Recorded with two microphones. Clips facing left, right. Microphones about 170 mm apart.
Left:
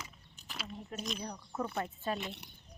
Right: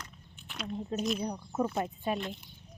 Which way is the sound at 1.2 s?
30° right (ahead or behind).